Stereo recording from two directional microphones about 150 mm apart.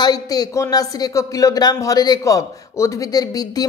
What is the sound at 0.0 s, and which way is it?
Speech, 25° left (ahead or behind).